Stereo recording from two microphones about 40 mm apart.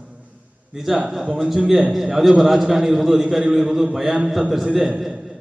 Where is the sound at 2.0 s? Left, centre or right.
Centre.